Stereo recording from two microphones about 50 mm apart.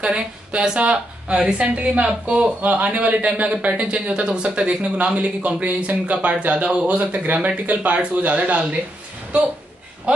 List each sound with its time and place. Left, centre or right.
0.0 s a man's voice: right
10.1 s speech: right